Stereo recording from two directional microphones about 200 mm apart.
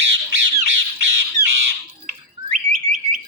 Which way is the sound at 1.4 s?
55° right (ahead or behind).